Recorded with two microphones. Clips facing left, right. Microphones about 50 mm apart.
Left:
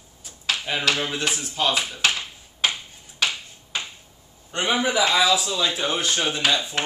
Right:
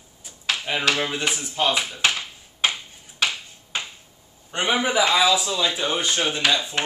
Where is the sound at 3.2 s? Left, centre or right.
Right.